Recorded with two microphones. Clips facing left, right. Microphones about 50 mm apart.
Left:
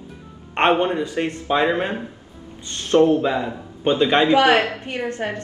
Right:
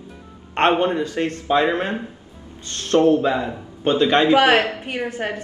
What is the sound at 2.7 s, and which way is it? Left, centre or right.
Speech, left.